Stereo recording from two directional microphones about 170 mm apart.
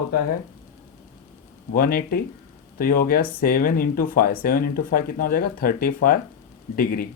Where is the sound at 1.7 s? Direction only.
60° left (ahead or behind).